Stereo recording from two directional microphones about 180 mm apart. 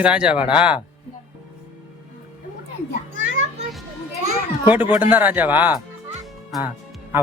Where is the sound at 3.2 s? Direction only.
90° right.